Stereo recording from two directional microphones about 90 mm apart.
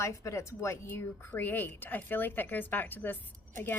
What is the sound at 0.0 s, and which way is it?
A woman's voice, 35° left (ahead or behind).